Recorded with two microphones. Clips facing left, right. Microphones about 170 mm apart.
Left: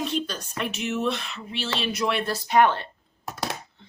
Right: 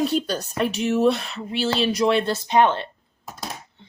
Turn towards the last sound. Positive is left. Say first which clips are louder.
# left 3 dB
turn(degrees=80)